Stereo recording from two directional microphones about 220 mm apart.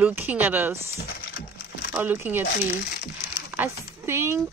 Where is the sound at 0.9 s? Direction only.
45° left (ahead or behind).